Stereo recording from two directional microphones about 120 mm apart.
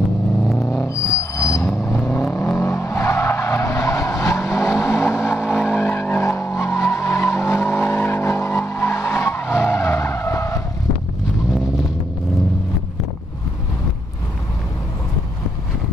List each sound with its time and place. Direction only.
0.6 s vehicle: centre (ahead or behind)
0.8 s train wheels squealing: 25° left (ahead or behind)
2.3 s vehicle: 20° left (ahead or behind)
11.5 s vehicle: 5° right (ahead or behind)